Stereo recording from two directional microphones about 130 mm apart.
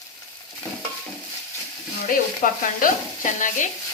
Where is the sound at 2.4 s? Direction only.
85° left.